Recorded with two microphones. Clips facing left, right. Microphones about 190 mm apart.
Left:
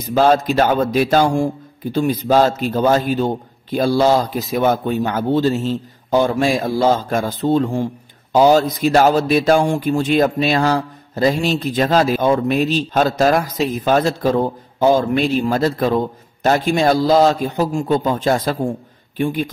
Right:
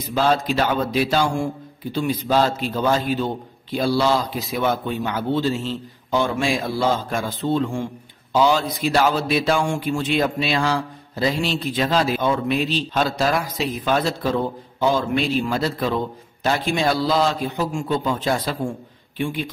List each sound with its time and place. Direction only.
0.0 s speech: 45° left (ahead or behind)